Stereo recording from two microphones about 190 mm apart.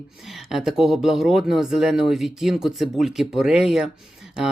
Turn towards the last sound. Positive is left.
turn(degrees=0)  # may be behind; listen again after turning